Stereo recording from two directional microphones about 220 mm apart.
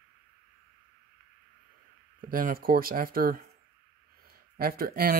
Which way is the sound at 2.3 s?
40° right (ahead or behind).